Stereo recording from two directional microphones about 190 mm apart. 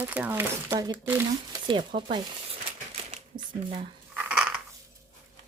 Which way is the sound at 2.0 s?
25° right (ahead or behind).